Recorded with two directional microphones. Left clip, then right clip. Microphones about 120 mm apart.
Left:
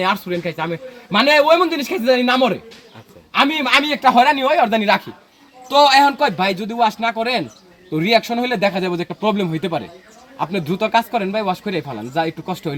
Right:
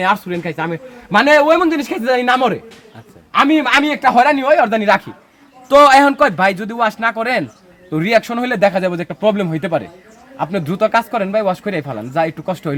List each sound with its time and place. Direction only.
0.0 s a man's voice: 45° right (ahead or behind)